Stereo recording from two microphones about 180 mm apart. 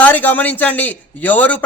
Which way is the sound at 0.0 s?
10° left (ahead or behind).